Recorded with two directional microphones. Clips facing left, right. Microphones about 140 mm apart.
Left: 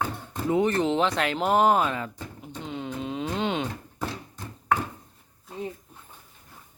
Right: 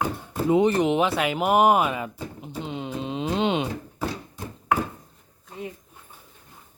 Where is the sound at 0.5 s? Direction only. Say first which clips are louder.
Right 3 dB; 20° right (ahead or behind).